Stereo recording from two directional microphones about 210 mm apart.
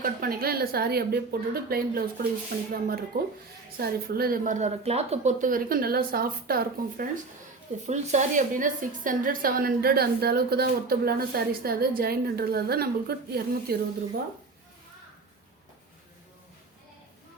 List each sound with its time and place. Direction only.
0.0 s speech: 45° right (ahead or behind)
7.9 s speech: 35° right (ahead or behind)